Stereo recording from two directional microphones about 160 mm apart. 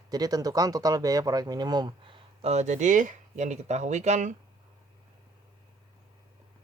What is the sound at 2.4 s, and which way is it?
Speech, 45° right (ahead or behind).